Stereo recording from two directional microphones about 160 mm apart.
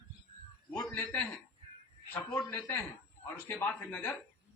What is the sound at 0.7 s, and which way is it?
Speech, 25° left (ahead or behind).